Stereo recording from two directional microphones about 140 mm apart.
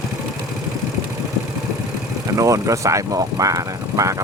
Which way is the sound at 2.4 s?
20° right (ahead or behind).